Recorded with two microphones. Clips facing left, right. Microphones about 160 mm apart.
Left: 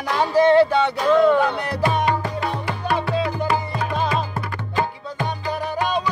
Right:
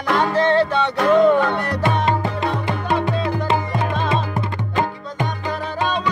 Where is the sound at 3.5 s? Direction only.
25° right (ahead or behind).